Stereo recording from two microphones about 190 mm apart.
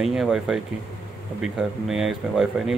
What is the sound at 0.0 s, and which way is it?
Speech, centre (ahead or behind).